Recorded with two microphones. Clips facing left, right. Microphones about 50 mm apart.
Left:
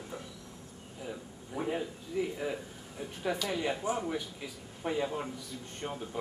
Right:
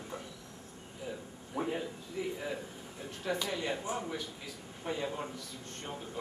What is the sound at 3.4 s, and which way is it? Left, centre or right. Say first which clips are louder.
A man's voice: left 3 dB; centre.